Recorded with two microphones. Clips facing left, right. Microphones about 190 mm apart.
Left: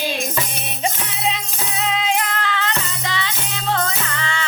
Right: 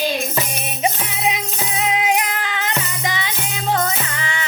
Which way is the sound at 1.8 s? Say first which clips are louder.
Right 2 dB; 15° right (ahead or behind).